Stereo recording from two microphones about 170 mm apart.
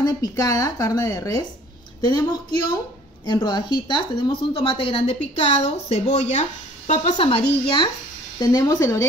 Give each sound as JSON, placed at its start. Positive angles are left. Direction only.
{"t": 0.0, "sound": "a woman's voice", "side_deg": 20}
{"t": 7.2, "sound": "a woman's voice", "side_deg": 35}